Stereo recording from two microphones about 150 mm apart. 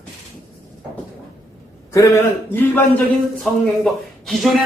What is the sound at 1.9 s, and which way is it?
Speech, 20° left (ahead or behind).